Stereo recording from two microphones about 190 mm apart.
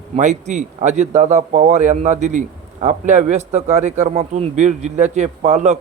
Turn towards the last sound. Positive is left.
turn(degrees=-35)  # may be behind; listen again after turning